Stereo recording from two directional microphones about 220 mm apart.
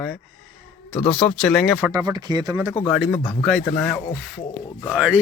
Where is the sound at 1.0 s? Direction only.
5° left (ahead or behind).